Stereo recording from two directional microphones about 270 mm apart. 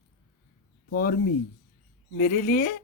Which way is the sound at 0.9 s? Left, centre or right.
Left.